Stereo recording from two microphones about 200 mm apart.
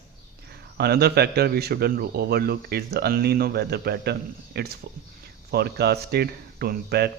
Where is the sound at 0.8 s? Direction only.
50° right (ahead or behind).